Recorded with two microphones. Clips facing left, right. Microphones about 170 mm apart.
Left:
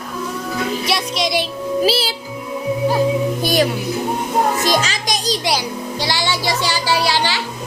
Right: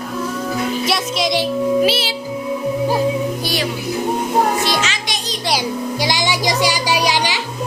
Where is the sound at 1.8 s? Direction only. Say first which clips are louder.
Even; 35° left (ahead or behind).